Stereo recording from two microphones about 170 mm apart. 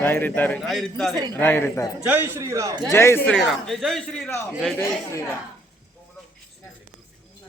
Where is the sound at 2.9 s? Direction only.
15° left (ahead or behind).